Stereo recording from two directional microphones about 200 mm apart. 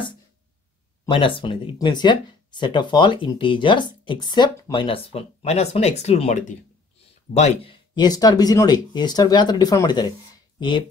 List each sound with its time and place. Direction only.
1.0 s speech: 25° left (ahead or behind)